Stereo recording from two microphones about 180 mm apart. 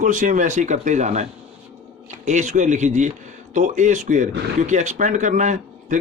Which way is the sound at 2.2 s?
40° right (ahead or behind).